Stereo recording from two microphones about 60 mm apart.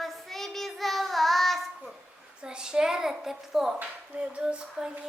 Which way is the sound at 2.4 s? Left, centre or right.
Centre.